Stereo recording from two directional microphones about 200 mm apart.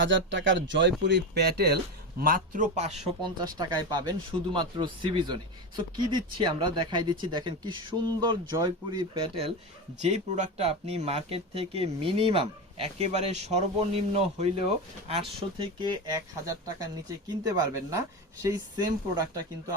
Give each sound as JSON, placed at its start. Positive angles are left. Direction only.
{"t": 0.0, "sound": "speech", "side_deg": -65}
{"t": 2.2, "sound": "a man's voice", "side_deg": -45}
{"t": 3.3, "sound": "a man's voice", "side_deg": -20}